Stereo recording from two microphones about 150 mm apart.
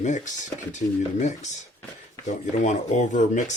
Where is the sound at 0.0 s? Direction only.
55° left (ahead or behind).